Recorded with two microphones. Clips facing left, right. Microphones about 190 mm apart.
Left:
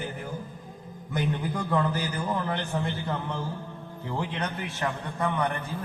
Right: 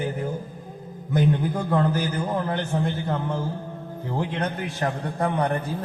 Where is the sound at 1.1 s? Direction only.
45° right (ahead or behind).